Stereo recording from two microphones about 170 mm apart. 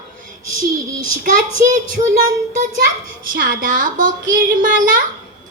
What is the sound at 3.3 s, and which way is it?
A child's voice, 50° right (ahead or behind).